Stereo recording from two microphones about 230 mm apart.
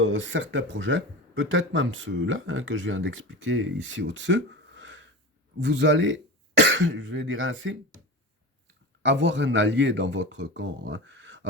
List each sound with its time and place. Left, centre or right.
0.0 s speech: right
9.0 s speech: right